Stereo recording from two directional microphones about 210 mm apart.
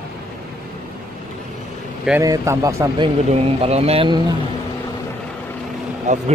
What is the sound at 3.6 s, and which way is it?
Speech, 30° right (ahead or behind).